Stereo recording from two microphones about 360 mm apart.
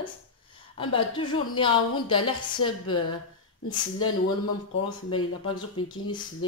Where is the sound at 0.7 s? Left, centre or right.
Centre.